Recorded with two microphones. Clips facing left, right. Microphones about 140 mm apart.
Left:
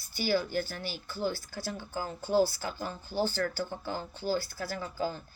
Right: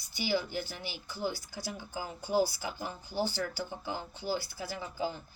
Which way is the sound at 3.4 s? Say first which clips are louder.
Left 3 dB; 15° right (ahead or behind).